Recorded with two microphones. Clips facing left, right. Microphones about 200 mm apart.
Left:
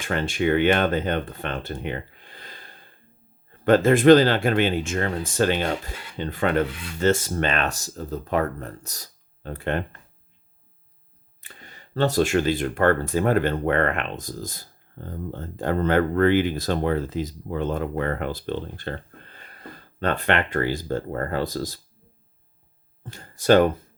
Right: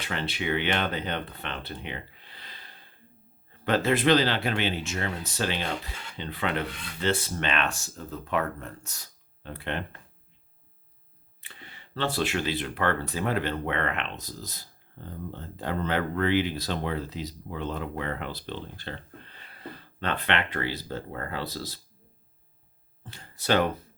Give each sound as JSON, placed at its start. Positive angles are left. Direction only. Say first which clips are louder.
{"t": 0.0, "sound": "speech", "louder": "left 8 dB", "side_deg": 50}
{"t": 11.3, "sound": "speech", "louder": "left 2 dB", "side_deg": 45}
{"t": 23.0, "sound": "speech", "louder": "left 9 dB", "side_deg": 45}